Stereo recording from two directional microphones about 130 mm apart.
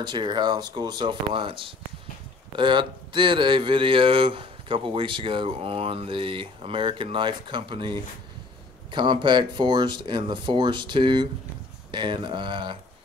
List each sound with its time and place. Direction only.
0.0 s speech: 35° right (ahead or behind)